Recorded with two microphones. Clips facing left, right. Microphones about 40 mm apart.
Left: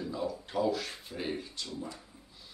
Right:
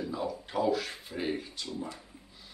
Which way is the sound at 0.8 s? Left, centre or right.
Centre.